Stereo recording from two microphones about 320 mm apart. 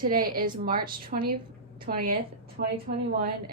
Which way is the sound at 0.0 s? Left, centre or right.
Right.